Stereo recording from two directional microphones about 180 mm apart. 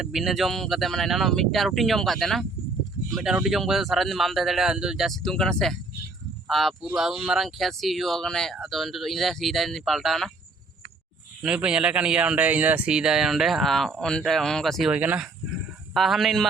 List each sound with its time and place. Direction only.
0.0 s speech: centre (ahead or behind)
11.4 s speech: 5° right (ahead or behind)